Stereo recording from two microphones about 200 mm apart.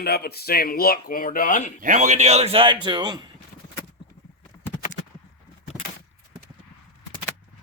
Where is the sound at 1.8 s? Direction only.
40° right (ahead or behind); by 3.2 s 20° right (ahead or behind).